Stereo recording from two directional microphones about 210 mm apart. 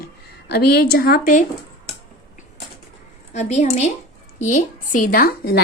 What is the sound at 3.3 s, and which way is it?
A woman's voice, 35° left (ahead or behind).